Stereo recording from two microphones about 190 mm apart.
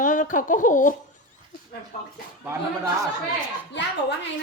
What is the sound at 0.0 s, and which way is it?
Speech, 40° left (ahead or behind).